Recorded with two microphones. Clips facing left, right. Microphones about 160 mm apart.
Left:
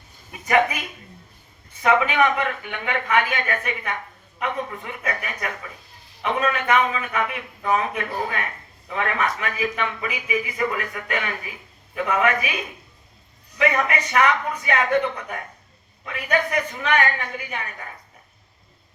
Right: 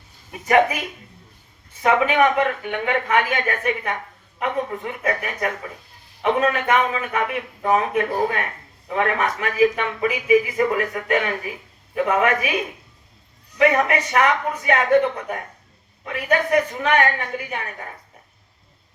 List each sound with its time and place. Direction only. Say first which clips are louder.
0.3 s a woman's voice: right 3 dB; 40° right (ahead or behind)
1.8 s a man's voice: right 2 dB; 45° right (ahead or behind)
13.6 s a man's voice: right 4 dB; 50° right (ahead or behind)